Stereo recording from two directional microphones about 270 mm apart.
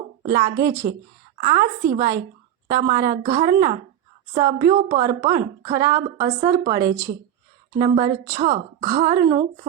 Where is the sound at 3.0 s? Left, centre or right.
Right.